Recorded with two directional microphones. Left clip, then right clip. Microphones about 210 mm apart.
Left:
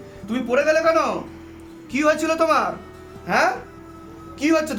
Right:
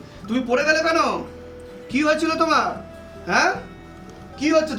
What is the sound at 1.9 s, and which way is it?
Speech, 40° left (ahead or behind).